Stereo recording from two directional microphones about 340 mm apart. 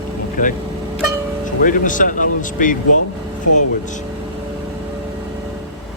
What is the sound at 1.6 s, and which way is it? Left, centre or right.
Speech, left.